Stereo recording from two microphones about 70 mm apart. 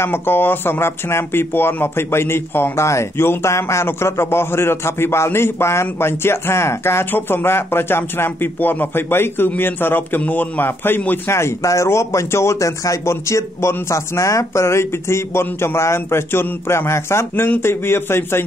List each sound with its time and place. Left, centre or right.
0.0 s speech: left
11.2 s speech: left